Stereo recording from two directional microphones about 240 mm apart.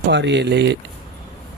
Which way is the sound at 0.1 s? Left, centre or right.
Right.